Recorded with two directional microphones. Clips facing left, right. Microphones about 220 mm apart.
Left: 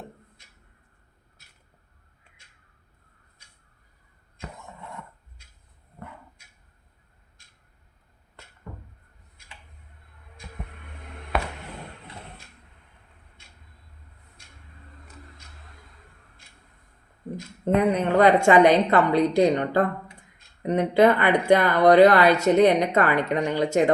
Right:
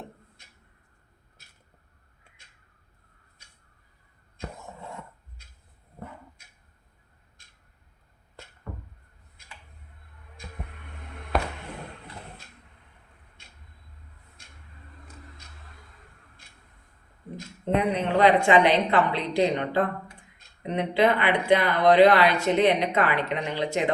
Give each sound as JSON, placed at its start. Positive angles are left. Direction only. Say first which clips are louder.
{"t": 17.9, "sound": "speech", "louder": "left 1 dB", "side_deg": 45}